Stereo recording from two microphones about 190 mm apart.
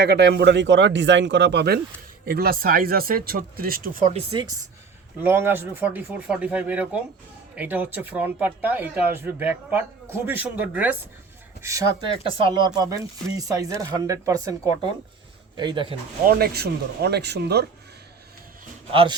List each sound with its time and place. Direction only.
0.0 s speech: 60° right (ahead or behind)
4.1 s speech: 25° right (ahead or behind)
5.2 s speech: 10° right (ahead or behind)
12.3 s speech: 25° right (ahead or behind)
15.5 s speech: 25° right (ahead or behind)
16.2 s speech: 55° right (ahead or behind)
18.9 s speech: 25° right (ahead or behind)